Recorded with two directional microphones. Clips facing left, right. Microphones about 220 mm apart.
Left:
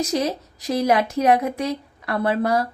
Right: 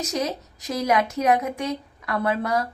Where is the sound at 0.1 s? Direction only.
30° left (ahead or behind).